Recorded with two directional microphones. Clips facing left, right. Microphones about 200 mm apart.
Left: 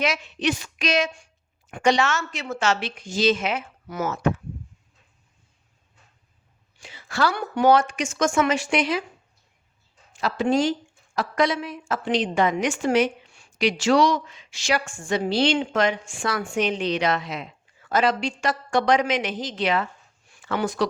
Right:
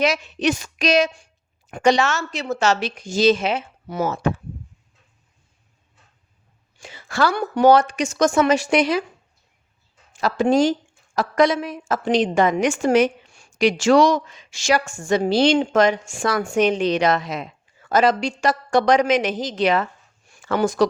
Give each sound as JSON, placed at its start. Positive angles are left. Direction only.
{"t": 0.0, "sound": "speech", "side_deg": -40}
{"t": 6.7, "sound": "speech", "side_deg": -45}
{"t": 10.2, "sound": "a woman's voice", "side_deg": -45}